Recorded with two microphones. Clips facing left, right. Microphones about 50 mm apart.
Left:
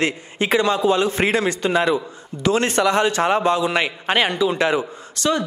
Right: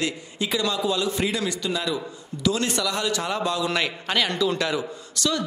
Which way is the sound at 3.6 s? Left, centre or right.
Left.